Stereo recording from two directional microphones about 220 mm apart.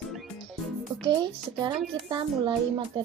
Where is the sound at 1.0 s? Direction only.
20° right (ahead or behind).